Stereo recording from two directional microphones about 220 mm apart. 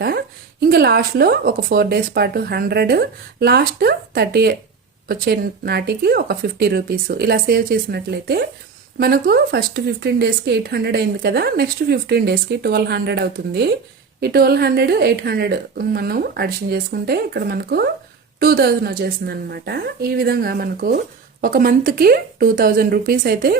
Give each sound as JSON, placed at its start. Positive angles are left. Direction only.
{"t": 0.6, "sound": "speech", "side_deg": -45}